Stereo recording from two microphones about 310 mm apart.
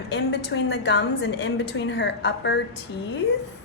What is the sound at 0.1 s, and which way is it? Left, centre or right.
A woman's voice, left.